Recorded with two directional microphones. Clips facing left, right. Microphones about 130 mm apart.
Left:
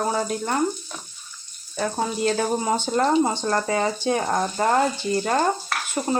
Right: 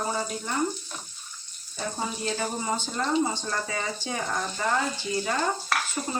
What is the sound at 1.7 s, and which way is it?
Speech, 75° left (ahead or behind).